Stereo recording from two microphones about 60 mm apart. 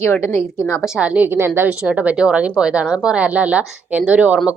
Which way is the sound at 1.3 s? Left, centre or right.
Right.